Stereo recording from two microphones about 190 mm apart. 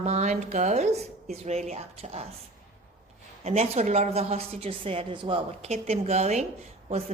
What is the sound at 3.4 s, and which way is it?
A woman's voice, 35° right (ahead or behind).